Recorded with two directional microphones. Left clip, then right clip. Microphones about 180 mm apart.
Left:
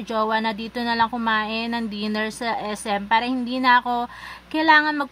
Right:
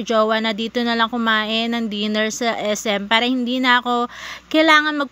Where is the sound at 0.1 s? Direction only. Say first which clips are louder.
Right 5 dB; 15° right (ahead or behind).